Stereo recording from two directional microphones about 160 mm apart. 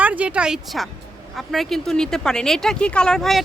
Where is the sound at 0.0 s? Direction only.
10° right (ahead or behind).